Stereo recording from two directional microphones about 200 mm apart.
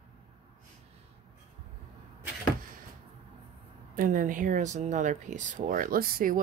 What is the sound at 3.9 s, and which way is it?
Speech, 45° right (ahead or behind).